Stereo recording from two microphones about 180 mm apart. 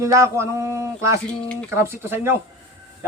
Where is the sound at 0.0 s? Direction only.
15° right (ahead or behind).